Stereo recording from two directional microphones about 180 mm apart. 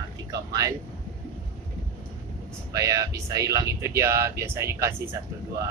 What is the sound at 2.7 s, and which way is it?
Speech, 15° right (ahead or behind).